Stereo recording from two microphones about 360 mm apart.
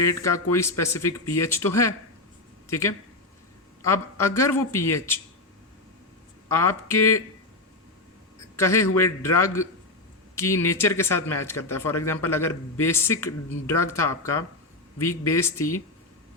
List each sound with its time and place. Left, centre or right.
0.0 s speech: centre
6.5 s speech: centre
8.5 s speech: centre